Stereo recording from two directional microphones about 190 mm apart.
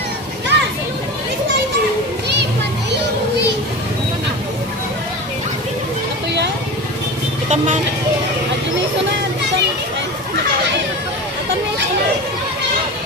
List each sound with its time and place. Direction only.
0.5 s children playing: 65° right (ahead or behind)
7.4 s vehicle: 40° right (ahead or behind)